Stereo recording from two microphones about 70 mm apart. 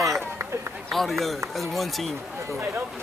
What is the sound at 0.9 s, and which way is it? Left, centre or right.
Speech, centre.